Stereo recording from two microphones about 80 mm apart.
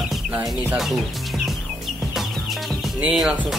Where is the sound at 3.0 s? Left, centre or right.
Centre.